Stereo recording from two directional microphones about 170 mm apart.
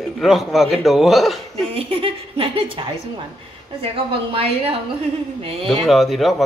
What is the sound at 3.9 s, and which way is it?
A woman's voice, 35° right (ahead or behind).